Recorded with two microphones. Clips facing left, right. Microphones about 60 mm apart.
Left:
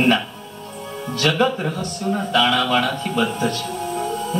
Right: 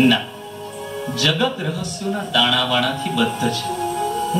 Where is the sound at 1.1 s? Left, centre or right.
Left.